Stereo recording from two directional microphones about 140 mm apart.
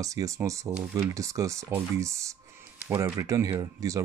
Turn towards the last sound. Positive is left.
turn(degrees=-20)  # may be behind; listen again after turning